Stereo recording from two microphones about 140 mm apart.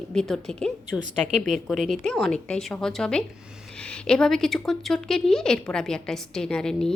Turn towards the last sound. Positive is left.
turn(degrees=5)  # may be behind; listen again after turning